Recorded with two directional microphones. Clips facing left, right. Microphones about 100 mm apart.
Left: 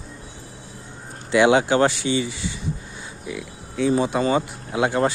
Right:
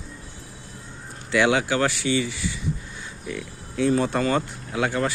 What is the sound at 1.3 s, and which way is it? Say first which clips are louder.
Speech: left 4 dB; 20° left (ahead or behind).